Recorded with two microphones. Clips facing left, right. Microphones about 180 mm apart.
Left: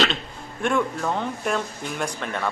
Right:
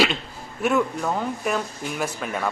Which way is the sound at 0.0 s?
5° right (ahead or behind).